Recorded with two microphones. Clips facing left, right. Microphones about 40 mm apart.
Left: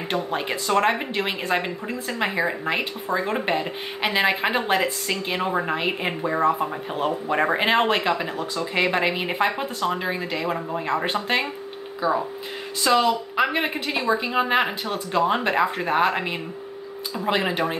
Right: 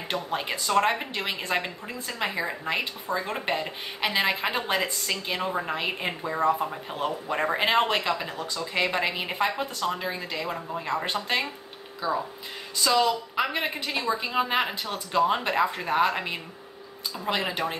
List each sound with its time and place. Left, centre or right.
0.1 s a woman's voice: centre
13.9 s a woman's voice: left
14.2 s a woman's voice: centre